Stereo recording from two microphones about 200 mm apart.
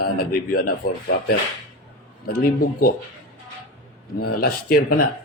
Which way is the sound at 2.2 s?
45° left (ahead or behind).